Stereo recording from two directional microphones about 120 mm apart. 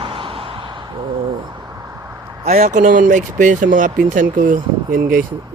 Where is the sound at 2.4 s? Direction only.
75° right (ahead or behind); by 4.6 s 90° right.